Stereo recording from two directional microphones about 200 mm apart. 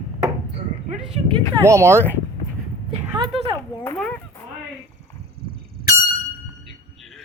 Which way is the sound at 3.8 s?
10° left (ahead or behind).